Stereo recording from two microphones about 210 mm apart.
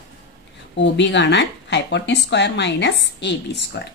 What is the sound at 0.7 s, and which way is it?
Speech, 55° left (ahead or behind).